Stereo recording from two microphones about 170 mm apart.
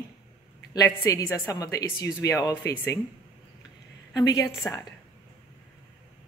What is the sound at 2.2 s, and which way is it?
Speech, 90° left.